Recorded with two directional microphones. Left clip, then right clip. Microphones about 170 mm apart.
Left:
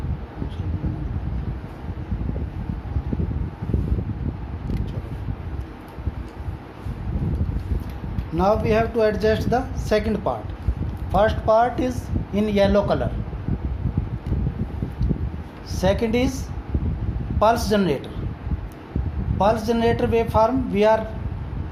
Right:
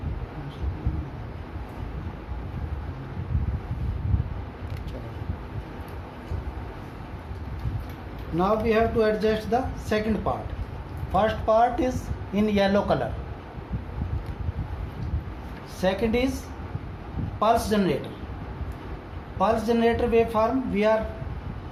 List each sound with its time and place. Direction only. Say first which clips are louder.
8.4 s speech: left 3 dB; 60° left (ahead or behind)
11.1 s speech: left 4 dB; 40° left (ahead or behind)
15.8 s a man's voice: left 3 dB; 55° left (ahead or behind)
17.4 s a man's voice: left 3 dB; 50° left (ahead or behind)
19.4 s a man's voice: left 3 dB; 50° left (ahead or behind)